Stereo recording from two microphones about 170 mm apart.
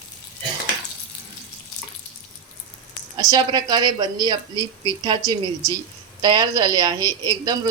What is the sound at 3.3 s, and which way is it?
Speech, 25° right (ahead or behind).